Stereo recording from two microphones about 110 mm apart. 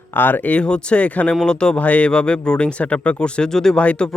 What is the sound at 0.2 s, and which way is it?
Speech, 15° left (ahead or behind).